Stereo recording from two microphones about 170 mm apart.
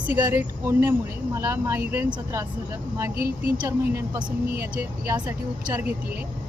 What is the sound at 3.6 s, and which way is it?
Speech, 15° right (ahead or behind).